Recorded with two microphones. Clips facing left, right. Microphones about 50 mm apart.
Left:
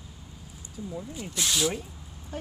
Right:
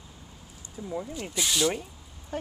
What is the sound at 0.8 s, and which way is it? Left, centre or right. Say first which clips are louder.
Speech: even; right.